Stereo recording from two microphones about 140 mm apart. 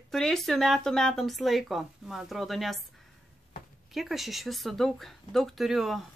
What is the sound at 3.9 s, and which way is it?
Speech, centre (ahead or behind).